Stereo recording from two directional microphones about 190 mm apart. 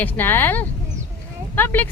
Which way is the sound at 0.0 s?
10° left (ahead or behind).